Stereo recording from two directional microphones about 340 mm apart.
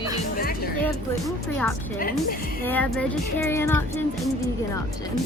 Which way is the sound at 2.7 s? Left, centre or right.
Centre.